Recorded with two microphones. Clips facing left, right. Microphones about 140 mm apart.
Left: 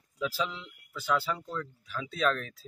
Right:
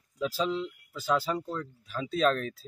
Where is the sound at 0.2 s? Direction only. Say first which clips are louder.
Right 4 dB; 35° right (ahead or behind).